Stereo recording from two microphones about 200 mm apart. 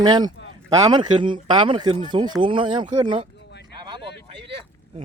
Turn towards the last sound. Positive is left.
turn(degrees=60)  # may be behind; listen again after turning